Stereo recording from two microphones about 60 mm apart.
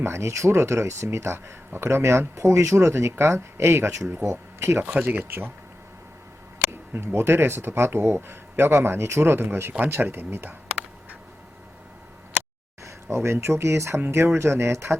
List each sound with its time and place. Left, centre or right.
0.0 s speech: right
4.8 s speech: right
6.9 s speech: right
12.8 s speech: right